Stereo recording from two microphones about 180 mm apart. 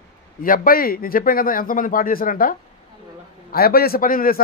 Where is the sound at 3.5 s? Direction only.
60° left (ahead or behind).